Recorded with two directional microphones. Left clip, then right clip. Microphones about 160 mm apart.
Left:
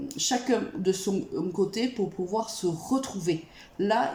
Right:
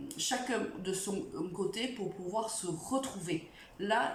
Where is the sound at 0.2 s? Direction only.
25° left (ahead or behind).